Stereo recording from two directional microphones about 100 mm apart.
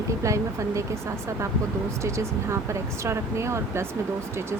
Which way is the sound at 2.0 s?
30° right (ahead or behind).